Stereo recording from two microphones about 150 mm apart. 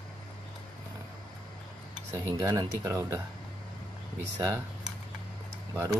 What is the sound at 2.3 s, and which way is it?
Speech, 20° right (ahead or behind).